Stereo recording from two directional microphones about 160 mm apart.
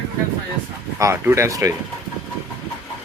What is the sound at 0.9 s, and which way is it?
Speech, 15° right (ahead or behind).